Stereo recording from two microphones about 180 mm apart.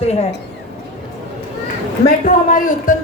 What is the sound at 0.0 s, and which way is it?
Speech, 35° left (ahead or behind).